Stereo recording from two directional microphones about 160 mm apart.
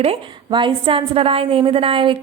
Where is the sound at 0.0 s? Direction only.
35° right (ahead or behind).